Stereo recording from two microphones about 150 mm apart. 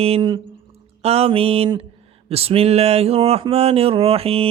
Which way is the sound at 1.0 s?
45° right (ahead or behind).